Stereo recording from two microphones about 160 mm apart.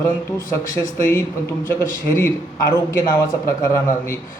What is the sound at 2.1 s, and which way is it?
A man's voice, 15° left (ahead or behind).